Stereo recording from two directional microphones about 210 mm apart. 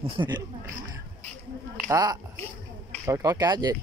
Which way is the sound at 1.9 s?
20° right (ahead or behind).